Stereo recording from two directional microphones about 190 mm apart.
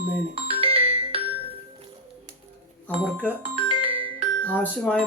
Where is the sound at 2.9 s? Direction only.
10° left (ahead or behind).